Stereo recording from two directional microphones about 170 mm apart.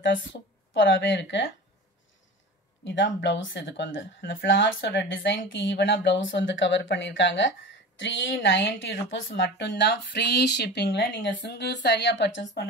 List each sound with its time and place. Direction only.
0.7 s speech: 90° left
2.8 s speech: 90° left